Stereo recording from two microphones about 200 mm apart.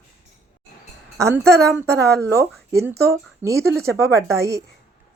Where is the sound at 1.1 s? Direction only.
15° right (ahead or behind).